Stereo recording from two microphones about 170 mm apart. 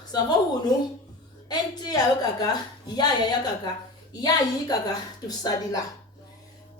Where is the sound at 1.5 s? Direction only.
25° left (ahead or behind).